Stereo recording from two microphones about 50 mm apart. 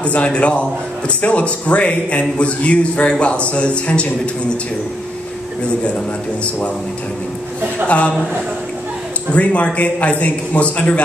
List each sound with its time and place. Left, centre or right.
0.0 s a man's voice: left
9.3 s a man's voice: left